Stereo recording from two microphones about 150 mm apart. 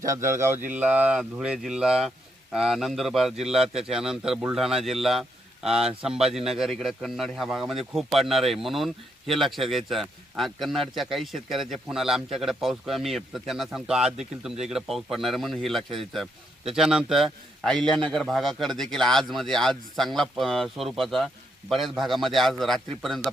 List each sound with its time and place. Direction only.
0.0 s a man's voice: 20° right (ahead or behind); by 23.3 s centre (ahead or behind)